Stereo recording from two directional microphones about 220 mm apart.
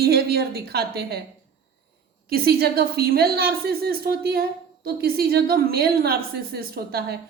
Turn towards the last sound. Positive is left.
turn(degrees=-45)  # may be behind; listen again after turning